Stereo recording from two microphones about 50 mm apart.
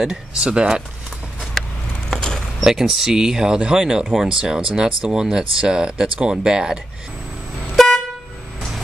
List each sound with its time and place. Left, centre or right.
0.0 s speech: centre
2.0 s vehicle: centre
2.6 s speech: centre
6.1 s speech: right
6.4 s speech: centre
7.7 s vehicle horn: centre